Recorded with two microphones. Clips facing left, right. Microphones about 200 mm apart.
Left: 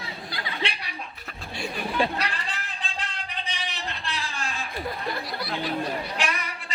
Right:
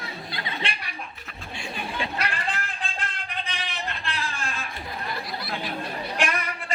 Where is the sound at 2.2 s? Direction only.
50° right (ahead or behind).